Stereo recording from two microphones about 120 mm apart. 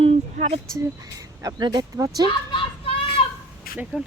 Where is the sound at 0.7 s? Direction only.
30° right (ahead or behind).